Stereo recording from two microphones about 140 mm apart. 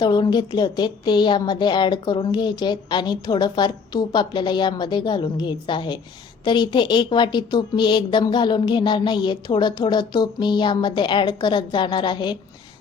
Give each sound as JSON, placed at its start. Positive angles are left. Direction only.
{"t": 0.0, "sound": "a woman's voice", "side_deg": 30}